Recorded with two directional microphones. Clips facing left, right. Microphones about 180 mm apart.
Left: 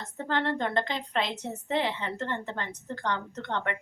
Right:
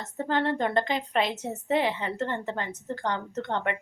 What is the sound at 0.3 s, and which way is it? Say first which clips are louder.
A woman's voice: right 2 dB; 15° right (ahead or behind).